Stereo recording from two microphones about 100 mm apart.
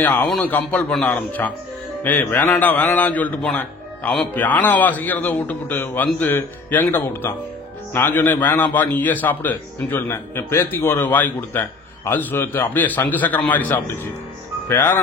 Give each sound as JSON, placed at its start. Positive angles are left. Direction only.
{"t": 0.4, "sound": "a man's voice", "side_deg": 15}